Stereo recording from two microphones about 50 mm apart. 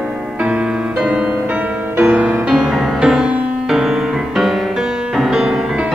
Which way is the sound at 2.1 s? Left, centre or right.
Right.